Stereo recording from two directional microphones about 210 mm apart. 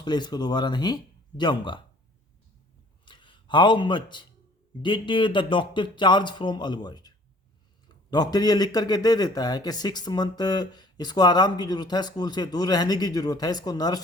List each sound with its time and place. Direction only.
0.0 s speech: 20° left (ahead or behind)
3.1 s speech: 20° left (ahead or behind)
8.1 s speech: 20° left (ahead or behind)